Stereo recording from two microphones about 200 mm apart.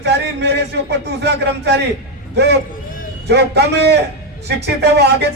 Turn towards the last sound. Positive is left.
turn(degrees=-55)  # may be behind; listen again after turning